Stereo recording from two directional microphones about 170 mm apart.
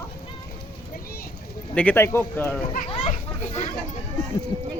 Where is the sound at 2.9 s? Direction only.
35° left (ahead or behind).